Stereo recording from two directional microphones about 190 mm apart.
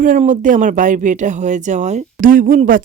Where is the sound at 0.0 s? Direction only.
40° right (ahead or behind).